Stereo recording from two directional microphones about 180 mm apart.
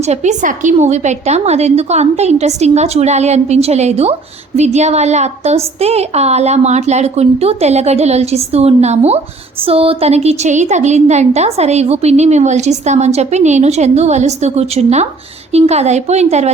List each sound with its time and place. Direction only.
0.0 s a woman's voice: 40° right (ahead or behind)